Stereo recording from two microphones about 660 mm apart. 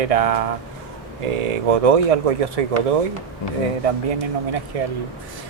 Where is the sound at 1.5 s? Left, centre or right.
Right.